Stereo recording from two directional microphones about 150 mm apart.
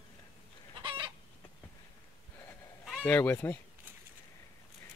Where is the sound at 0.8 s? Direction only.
35° right (ahead or behind).